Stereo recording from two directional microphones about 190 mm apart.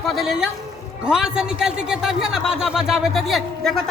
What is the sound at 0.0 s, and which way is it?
A woman's voice, centre (ahead or behind).